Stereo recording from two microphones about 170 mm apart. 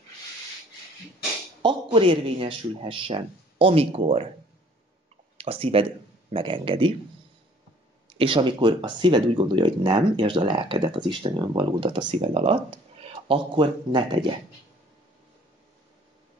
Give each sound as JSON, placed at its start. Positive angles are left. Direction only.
{"t": 1.6, "sound": "speech", "side_deg": -30}
{"t": 5.4, "sound": "speech", "side_deg": -35}
{"t": 8.1, "sound": "speech", "side_deg": -30}